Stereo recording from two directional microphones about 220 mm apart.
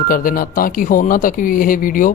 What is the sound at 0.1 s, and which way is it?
Speech, 40° left (ahead or behind).